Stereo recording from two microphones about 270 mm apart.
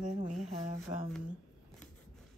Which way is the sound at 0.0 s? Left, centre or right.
Right.